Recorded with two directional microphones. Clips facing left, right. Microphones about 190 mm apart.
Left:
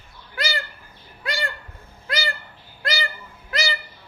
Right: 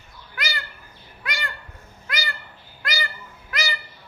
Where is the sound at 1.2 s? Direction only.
30° left (ahead or behind).